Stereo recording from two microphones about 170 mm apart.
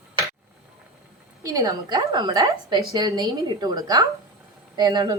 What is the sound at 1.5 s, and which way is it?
Speech, 20° right (ahead or behind).